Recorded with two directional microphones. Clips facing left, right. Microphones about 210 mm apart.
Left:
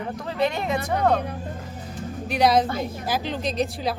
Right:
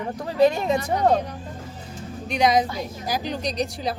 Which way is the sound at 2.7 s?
55° left (ahead or behind).